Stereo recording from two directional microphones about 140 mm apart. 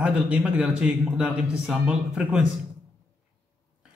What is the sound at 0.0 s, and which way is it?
A man's voice, 10° right (ahead or behind).